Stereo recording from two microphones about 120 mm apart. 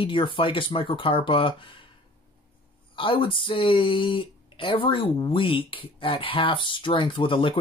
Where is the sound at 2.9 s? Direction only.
45° left (ahead or behind).